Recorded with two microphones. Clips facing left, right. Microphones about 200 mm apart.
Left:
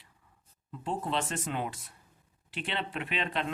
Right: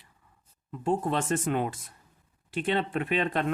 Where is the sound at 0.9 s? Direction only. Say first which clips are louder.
Right 6 dB; 50° right (ahead or behind).